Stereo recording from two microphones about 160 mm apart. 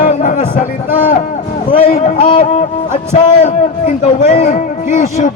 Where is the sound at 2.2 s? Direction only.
35° left (ahead or behind).